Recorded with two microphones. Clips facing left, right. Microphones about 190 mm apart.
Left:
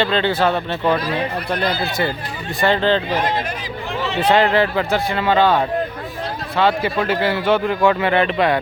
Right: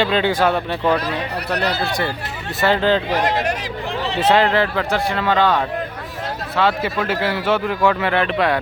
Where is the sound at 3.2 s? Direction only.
80° right.